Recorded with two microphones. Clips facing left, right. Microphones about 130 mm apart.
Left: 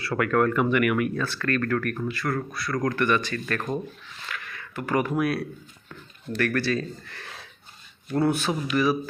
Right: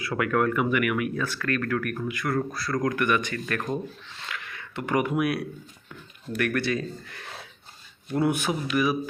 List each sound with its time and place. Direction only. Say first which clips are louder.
0.0 s speech: left 2 dB; 15° right (ahead or behind)
2.3 s speech: right 2 dB; 30° right (ahead or behind)
2.8 s speech: left 1 dB; 15° right (ahead or behind)